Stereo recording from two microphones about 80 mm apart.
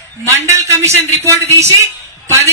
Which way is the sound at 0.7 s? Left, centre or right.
Right.